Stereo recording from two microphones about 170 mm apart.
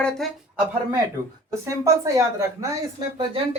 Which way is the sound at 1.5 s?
20° right (ahead or behind).